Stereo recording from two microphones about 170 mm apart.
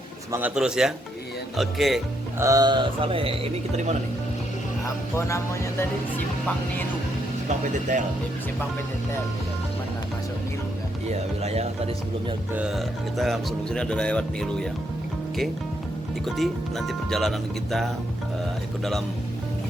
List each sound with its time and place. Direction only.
0.3 s speech: 10° right (ahead or behind)
2.4 s speech: 20° right (ahead or behind)
5.1 s music: 15° left (ahead or behind)
7.7 s speech: 45° right (ahead or behind)
11.1 s speech: 40° right (ahead or behind)
12.5 s speech: centre (ahead or behind)
16.2 s speech: centre (ahead or behind)